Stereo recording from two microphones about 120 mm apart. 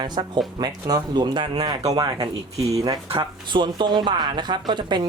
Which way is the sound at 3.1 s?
40° right (ahead or behind).